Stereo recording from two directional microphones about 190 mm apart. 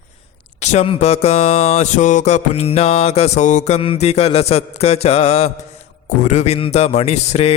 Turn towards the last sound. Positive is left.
turn(degrees=35)  # may be behind; listen again after turning